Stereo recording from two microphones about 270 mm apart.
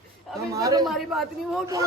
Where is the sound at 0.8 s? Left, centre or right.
Centre.